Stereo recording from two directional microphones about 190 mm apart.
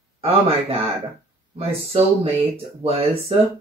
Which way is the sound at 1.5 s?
30° right (ahead or behind).